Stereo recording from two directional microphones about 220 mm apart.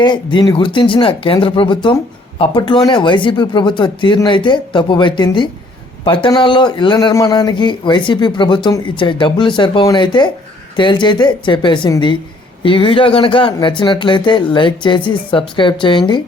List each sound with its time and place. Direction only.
0.0 s a man's voice: 20° left (ahead or behind)